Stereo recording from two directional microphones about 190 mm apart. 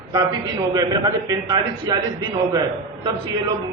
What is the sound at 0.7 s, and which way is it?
A man's voice, 20° right (ahead or behind).